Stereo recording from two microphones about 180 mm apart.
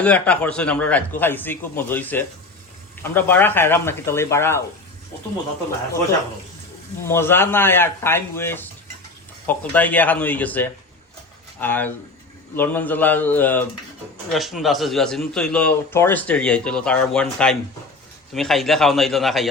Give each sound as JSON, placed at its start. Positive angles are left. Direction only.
{"t": 0.0, "sound": "a man's voice", "side_deg": 5}
{"t": 7.0, "sound": "a man's voice", "side_deg": 15}
{"t": 14.3, "sound": "speech", "side_deg": 0}